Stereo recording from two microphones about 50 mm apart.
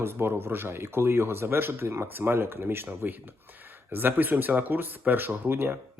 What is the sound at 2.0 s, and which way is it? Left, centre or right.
Speech, right.